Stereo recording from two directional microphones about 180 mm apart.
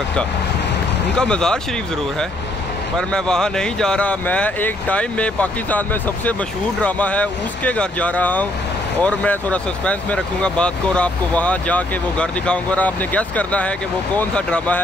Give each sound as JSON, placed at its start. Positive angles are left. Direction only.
{"t": 1.1, "sound": "speech", "side_deg": 5}
{"t": 3.0, "sound": "speech", "side_deg": 5}